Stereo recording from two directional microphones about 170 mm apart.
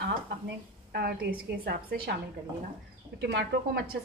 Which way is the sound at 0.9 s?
70° right (ahead or behind).